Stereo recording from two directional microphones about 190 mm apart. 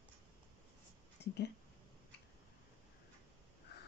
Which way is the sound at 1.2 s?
65° left (ahead or behind).